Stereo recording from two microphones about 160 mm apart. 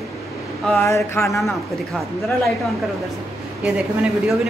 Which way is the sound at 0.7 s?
15° left (ahead or behind).